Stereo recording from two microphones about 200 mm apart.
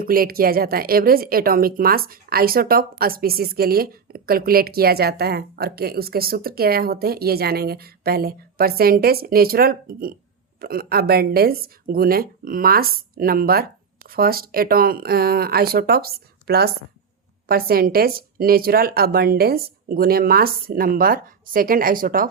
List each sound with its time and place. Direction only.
0.0 s speech: 45° right (ahead or behind)